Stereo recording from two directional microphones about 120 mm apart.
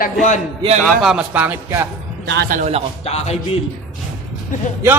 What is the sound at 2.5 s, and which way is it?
Speech, 70° right (ahead or behind).